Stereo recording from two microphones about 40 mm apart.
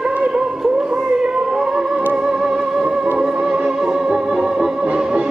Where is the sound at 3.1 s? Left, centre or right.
Centre.